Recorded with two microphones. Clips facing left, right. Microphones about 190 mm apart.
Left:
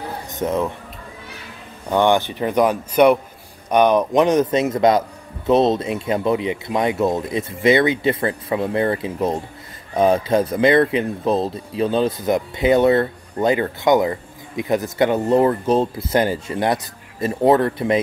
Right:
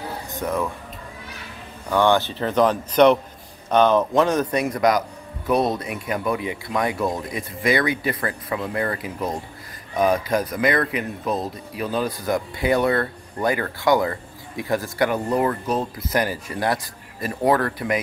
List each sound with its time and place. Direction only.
0.3 s speech: 20° left (ahead or behind)
1.9 s speech: 20° left (ahead or behind)